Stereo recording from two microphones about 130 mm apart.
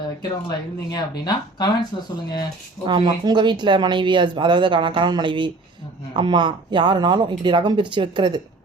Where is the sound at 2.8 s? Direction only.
35° right (ahead or behind).